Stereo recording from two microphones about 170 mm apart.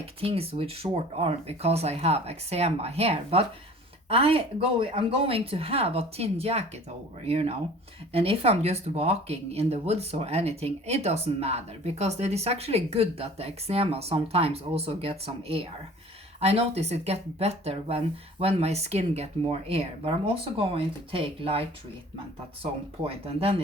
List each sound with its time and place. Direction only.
0.0 s speech: 35° right (ahead or behind)
22.6 s speech: 35° right (ahead or behind)